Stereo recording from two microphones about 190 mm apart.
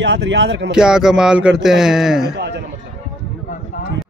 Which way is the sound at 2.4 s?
65° right (ahead or behind).